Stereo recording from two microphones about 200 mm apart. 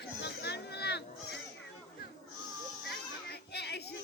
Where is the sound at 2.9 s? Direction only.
55° left (ahead or behind).